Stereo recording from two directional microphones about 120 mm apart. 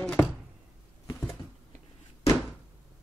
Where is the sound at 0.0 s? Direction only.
15° left (ahead or behind).